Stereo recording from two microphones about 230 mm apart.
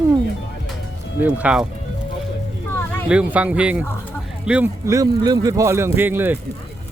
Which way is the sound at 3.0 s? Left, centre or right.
Centre.